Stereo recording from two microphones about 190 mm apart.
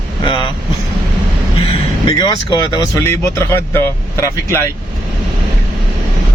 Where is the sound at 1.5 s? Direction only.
30° left (ahead or behind).